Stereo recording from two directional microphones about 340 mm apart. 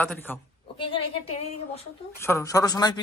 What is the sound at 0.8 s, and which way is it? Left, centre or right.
Speech, centre.